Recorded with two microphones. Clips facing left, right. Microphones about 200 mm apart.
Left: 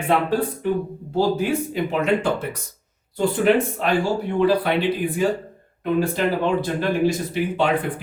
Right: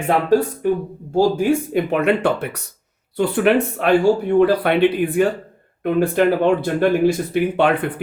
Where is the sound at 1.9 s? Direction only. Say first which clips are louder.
Right 3 dB; 65° right (ahead or behind).